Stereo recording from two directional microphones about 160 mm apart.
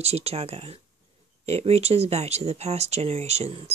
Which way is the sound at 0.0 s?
40° right (ahead or behind).